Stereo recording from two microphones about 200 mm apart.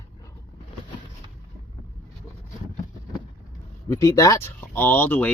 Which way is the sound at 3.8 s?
15° left (ahead or behind).